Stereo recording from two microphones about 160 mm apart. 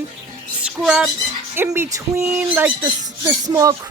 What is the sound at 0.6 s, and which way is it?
Speech, 5° right (ahead or behind).